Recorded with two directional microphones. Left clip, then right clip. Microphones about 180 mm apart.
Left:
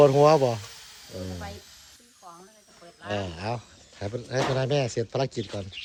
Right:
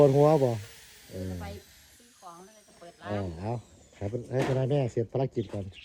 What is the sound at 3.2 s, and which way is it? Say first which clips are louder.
Speech: left 4 dB; 50° right (ahead or behind).